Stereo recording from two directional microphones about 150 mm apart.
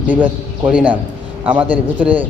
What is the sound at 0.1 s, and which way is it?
A man's voice, 10° right (ahead or behind).